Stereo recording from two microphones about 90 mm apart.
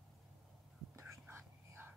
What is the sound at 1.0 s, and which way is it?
Whispering, 30° right (ahead or behind).